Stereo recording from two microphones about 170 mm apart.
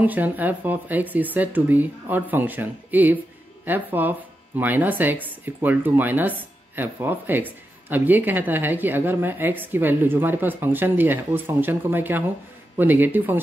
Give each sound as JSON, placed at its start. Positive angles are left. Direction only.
{"t": 0.0, "sound": "speech", "side_deg": -10}